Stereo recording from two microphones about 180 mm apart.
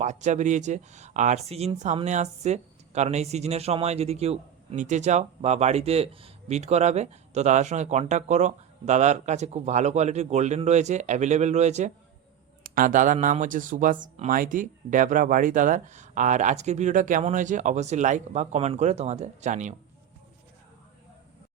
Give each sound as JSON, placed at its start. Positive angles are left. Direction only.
{"t": 0.0, "sound": "speech", "side_deg": -40}
{"t": 12.6, "sound": "speech", "side_deg": -50}